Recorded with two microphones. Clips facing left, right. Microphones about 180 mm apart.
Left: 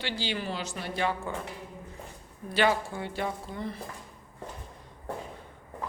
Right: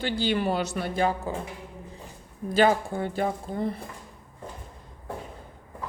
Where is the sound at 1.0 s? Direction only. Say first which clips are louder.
Right 4 dB; 40° right (ahead or behind).